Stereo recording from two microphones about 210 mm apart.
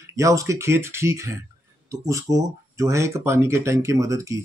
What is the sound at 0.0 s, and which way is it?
Speech, 15° right (ahead or behind).